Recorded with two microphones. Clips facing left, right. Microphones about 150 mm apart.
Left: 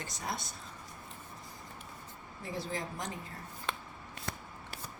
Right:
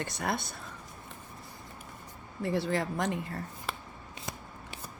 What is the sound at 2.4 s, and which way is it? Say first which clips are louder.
Speech: right 8 dB; 65° right (ahead or behind).